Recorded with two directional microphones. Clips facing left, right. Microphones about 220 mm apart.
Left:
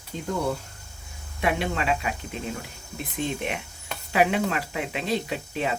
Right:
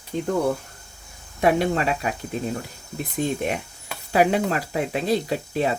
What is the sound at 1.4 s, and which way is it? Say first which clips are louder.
Speech: right 6 dB; 40° right (ahead or behind).